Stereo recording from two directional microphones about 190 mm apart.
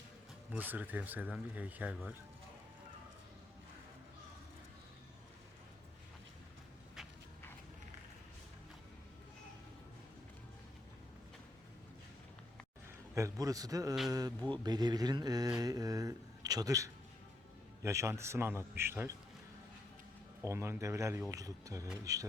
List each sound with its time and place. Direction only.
0.5 s speech: 10° right (ahead or behind)
13.1 s speech: 15° right (ahead or behind)
20.4 s speech: 15° right (ahead or behind)